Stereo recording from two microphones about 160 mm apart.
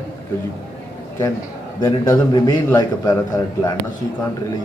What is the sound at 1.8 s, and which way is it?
A man's voice, 25° left (ahead or behind).